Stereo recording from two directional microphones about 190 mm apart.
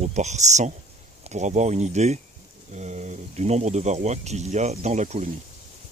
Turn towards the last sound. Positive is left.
turn(degrees=-35)  # may be behind; listen again after turning